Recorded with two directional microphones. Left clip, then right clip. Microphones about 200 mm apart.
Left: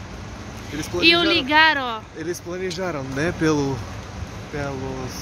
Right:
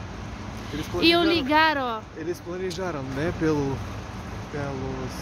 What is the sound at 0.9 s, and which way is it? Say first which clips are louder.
Speech: left 4 dB; 15° right (ahead or behind).